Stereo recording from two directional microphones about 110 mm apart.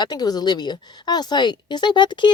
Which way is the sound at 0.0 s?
40° left (ahead or behind).